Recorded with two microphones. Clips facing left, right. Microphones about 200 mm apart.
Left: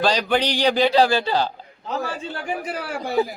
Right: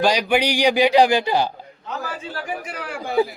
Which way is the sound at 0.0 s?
10° right (ahead or behind).